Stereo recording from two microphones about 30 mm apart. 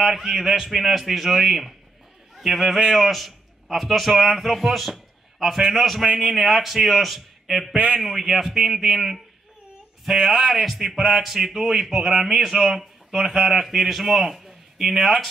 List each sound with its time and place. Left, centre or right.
0.0 s a man's voice: centre
7.7 s a man's voice: right
8.0 s a man's voice: centre
10.1 s speech: right
10.6 s a man's voice: centre
12.3 s speech: centre
13.3 s a man's voice: centre
13.7 s a man's voice: centre